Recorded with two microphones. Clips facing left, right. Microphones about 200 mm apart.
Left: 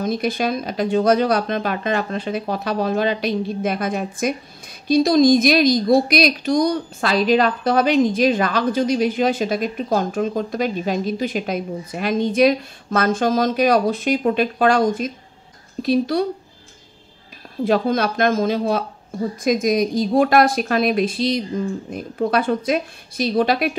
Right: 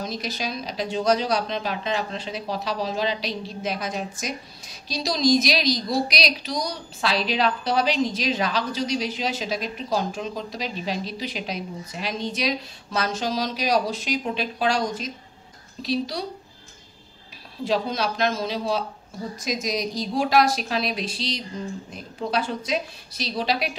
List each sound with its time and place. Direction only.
0.0 s a woman's voice: 55° left (ahead or behind)
17.6 s a woman's voice: 55° left (ahead or behind)